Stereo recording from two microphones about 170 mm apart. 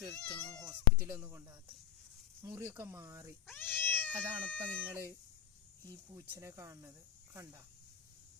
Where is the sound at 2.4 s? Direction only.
15° right (ahead or behind).